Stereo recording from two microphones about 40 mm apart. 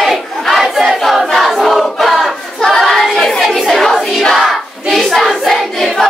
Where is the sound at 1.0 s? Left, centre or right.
Centre.